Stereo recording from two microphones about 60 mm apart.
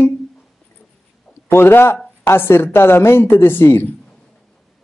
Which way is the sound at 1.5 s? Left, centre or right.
Left.